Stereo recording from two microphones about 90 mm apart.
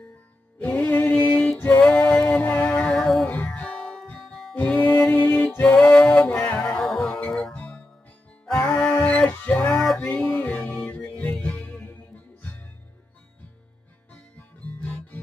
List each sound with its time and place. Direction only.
0.6 s music: 20° left (ahead or behind)
1.9 s music: 10° left (ahead or behind)
6.8 s music: centre (ahead or behind)
8.7 s a sound: 10° left (ahead or behind)
9.3 s music: 20° left (ahead or behind)
14.8 s music: 15° left (ahead or behind)